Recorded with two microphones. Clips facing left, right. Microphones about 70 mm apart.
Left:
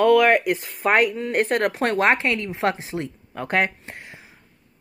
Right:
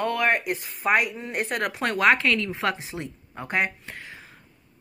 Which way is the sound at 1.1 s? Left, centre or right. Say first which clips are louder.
Left 8 dB; left.